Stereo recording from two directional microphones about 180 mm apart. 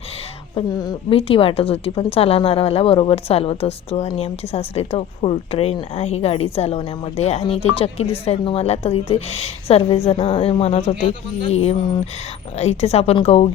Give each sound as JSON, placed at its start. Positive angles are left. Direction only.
{"t": 0.5, "sound": "a woman's voice", "side_deg": 25}